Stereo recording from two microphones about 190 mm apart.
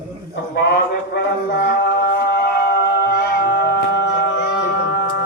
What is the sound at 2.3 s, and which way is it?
Music, 60° left (ahead or behind).